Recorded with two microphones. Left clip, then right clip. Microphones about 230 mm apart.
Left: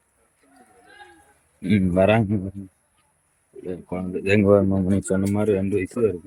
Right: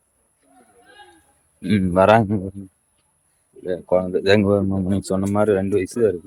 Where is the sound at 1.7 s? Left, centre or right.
Centre.